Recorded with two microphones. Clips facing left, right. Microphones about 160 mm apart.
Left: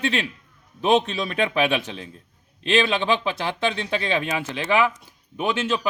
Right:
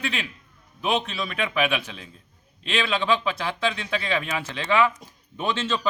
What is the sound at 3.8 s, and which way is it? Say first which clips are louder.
Speech: left 3 dB; 20° left (ahead or behind).